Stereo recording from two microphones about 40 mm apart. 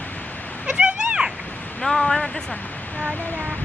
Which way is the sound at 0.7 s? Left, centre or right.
Right.